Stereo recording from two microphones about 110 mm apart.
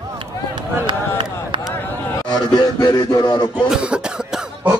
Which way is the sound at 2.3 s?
40° left (ahead or behind).